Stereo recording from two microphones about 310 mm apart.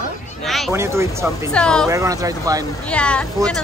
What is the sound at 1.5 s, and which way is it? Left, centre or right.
Speech, centre.